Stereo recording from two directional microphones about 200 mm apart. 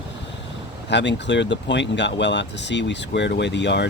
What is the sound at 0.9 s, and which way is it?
Speech, 60° left (ahead or behind).